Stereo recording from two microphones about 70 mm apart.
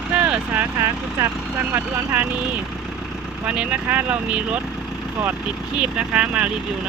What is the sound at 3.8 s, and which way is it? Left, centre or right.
Speech, right.